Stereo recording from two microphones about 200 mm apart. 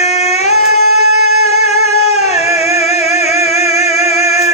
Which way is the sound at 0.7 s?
90° right.